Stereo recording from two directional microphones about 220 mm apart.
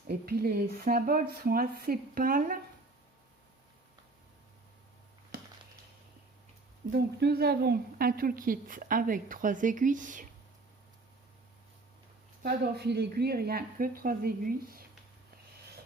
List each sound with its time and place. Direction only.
0.1 s a woman's voice: 45° right (ahead or behind)
6.9 s a woman's voice: 45° right (ahead or behind)
12.4 s speech: 45° right (ahead or behind)